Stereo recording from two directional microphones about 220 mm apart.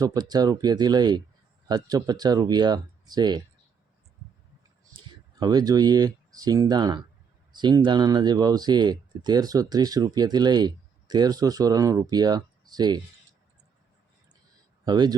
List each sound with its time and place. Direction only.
0.0 s speech: 20° right (ahead or behind)
4.9 s speech: 20° right (ahead or behind)
14.8 s speech: 20° right (ahead or behind)